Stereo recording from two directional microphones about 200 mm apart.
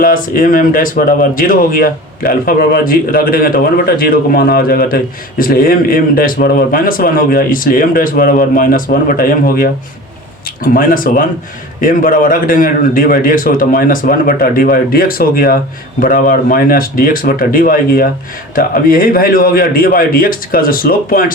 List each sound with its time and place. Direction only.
0.0 s speech: 45° left (ahead or behind)